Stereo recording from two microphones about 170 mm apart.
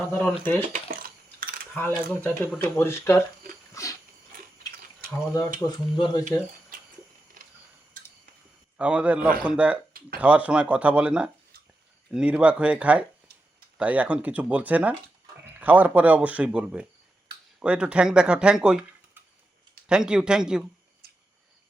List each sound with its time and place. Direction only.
0.0 s speech: 5° left (ahead or behind)
0.7 s coin: 55° right (ahead or behind)
1.8 s speech: 10° left (ahead or behind)
5.1 s speech: 15° left (ahead or behind)
8.8 s speech: 5° right (ahead or behind)
19.9 s speech: 5° right (ahead or behind)
21.0 s a sound: 65° right (ahead or behind)